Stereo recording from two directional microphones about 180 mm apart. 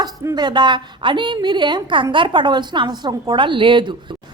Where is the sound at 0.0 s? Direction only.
25° right (ahead or behind).